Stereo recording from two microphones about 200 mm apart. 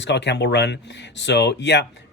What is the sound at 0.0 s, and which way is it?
Speech, 60° left (ahead or behind).